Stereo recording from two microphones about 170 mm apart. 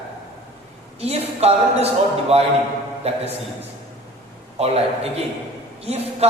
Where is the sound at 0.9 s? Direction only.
35° right (ahead or behind).